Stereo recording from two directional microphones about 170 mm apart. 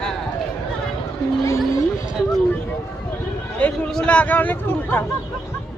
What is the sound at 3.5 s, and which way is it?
Speech, 10° left (ahead or behind).